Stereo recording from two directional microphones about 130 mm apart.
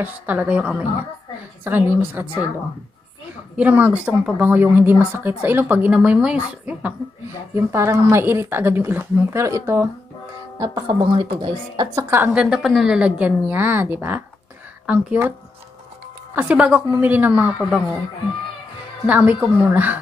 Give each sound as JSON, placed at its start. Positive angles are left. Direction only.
{"t": 0.0, "sound": "speech", "side_deg": -10}
{"t": 3.5, "sound": "speech", "side_deg": -10}
{"t": 7.5, "sound": "speech", "side_deg": -20}
{"t": 10.6, "sound": "a woman's voice", "side_deg": -30}
{"t": 12.4, "sound": "speech", "side_deg": -5}
{"t": 16.3, "sound": "speech", "side_deg": -10}
{"t": 19.0, "sound": "speech", "side_deg": -10}